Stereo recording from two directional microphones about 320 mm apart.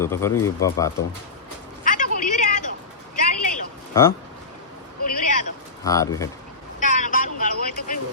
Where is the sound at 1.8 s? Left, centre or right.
Left.